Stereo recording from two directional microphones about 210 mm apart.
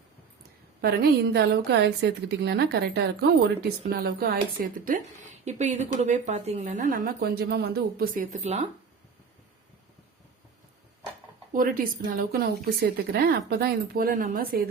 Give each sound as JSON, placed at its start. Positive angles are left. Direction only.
{"t": 0.8, "sound": "a woman's voice", "side_deg": -50}
{"t": 11.5, "sound": "a woman's voice", "side_deg": -40}